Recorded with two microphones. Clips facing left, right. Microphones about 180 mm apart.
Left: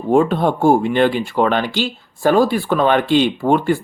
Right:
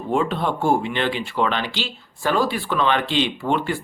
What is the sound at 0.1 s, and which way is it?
Speech, 45° left (ahead or behind).